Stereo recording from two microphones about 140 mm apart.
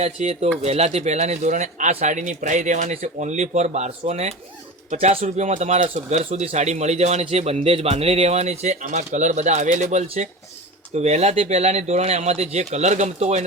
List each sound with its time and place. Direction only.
0.0 s speech: 50° right (ahead or behind)